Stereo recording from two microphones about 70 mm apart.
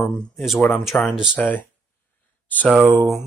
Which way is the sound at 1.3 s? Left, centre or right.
Left.